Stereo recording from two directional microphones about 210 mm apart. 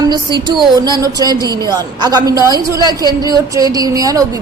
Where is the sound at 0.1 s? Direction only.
20° right (ahead or behind).